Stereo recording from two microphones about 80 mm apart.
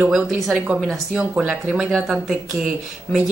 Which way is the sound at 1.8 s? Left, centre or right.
Centre.